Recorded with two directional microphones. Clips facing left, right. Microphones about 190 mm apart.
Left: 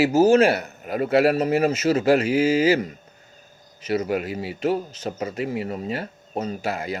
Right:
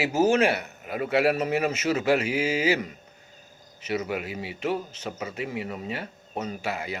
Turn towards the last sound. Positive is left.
turn(degrees=40)  # may be behind; listen again after turning